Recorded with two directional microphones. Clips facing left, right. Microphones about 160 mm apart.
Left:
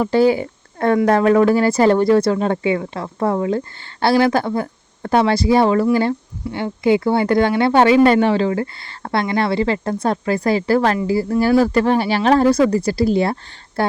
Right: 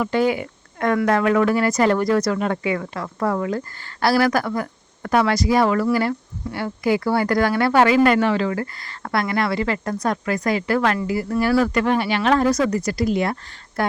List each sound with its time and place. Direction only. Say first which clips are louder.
0.0 s speech: left 5 dB; 30° left (ahead or behind)